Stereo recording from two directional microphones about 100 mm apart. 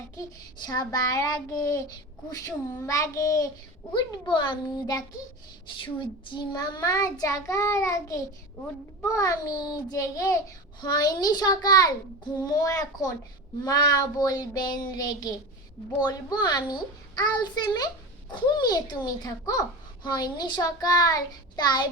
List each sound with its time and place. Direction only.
0.6 s a child's voice: 40° left (ahead or behind)
4.1 s a child's voice: 50° left (ahead or behind)
5.6 s a child's voice: 55° left (ahead or behind)